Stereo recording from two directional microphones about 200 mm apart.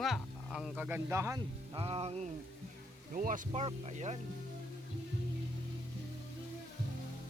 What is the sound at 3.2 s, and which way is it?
Speech, 40° right (ahead or behind).